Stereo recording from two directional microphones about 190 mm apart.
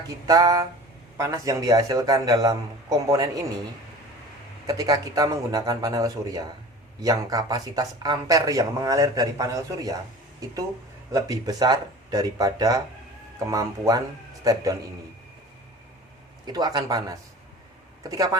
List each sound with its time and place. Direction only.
0.3 s a man's voice: 20° right (ahead or behind)
4.6 s a man's voice: 20° right (ahead or behind)
16.5 s speech: 20° right (ahead or behind)